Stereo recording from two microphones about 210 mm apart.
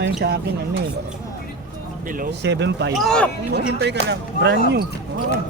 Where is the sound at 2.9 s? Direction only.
Centre (ahead or behind).